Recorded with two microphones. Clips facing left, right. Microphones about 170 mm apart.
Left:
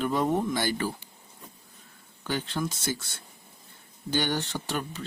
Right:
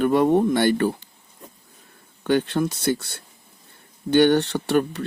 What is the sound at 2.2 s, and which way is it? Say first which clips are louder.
Speech: right 10 dB; 65° right (ahead or behind).